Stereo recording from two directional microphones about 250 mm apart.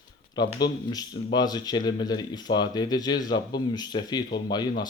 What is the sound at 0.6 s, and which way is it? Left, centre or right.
Speech, centre.